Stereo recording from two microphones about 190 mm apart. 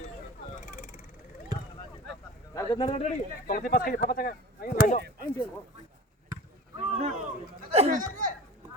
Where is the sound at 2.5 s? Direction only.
25° left (ahead or behind).